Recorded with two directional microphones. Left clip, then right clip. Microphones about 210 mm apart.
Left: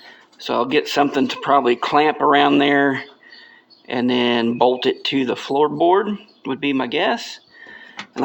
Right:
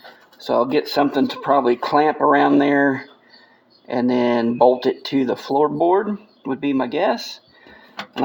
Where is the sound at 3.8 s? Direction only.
10° left (ahead or behind).